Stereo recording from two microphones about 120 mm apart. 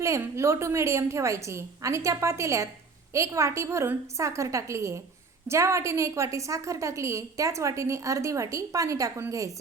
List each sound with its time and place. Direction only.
0.0 s a woman's voice: 25° right (ahead or behind)